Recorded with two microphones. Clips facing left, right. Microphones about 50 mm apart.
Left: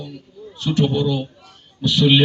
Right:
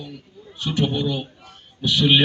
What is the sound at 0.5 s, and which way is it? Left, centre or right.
A man's voice, centre.